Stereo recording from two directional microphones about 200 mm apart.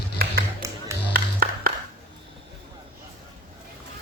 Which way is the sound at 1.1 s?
45° right (ahead or behind).